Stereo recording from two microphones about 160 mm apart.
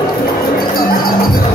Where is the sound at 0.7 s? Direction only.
65° left (ahead or behind).